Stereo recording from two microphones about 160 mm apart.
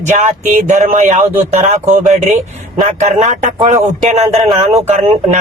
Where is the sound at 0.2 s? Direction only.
50° right (ahead or behind).